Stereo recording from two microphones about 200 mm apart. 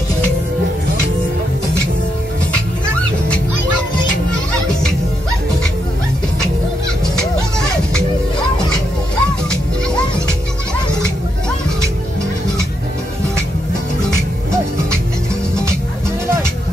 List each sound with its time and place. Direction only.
2.5 s music: 5° left (ahead or behind)
9.1 s music: 5° left (ahead or behind)